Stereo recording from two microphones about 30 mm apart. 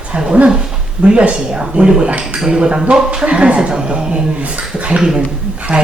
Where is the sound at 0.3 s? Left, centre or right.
Right.